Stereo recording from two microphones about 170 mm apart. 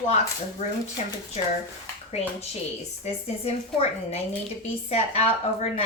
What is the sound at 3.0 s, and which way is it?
A woman's voice, 40° left (ahead or behind).